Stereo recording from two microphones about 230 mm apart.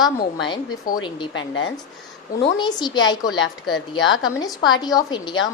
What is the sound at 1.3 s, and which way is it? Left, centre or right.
Speech, left.